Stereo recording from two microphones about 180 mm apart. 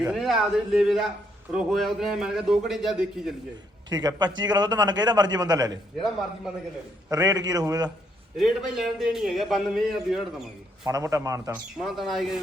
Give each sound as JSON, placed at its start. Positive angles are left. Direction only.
{"t": 0.0, "sound": "a man's voice", "side_deg": 0}
{"t": 3.8, "sound": "a man's voice", "side_deg": -25}
{"t": 7.1, "sound": "a man's voice", "side_deg": -20}
{"t": 8.4, "sound": "a man's voice", "side_deg": 0}
{"t": 10.8, "sound": "a man's voice", "side_deg": -15}
{"t": 11.8, "sound": "a man's voice", "side_deg": 0}